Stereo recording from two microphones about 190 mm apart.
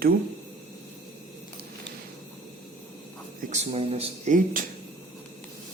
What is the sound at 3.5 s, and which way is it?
Speech, 35° right (ahead or behind).